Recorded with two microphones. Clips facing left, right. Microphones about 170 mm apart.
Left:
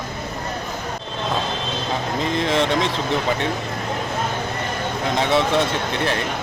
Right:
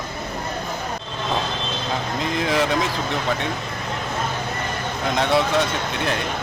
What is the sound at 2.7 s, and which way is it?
Speech, 30° left (ahead or behind).